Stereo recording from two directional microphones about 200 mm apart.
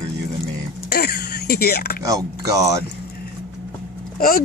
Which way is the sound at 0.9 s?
50° left (ahead or behind).